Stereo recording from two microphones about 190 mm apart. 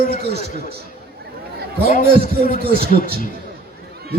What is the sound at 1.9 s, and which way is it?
Speech, 45° left (ahead or behind).